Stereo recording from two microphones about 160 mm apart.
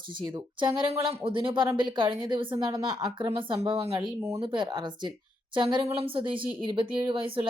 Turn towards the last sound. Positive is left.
turn(degrees=-30)  # may be behind; listen again after turning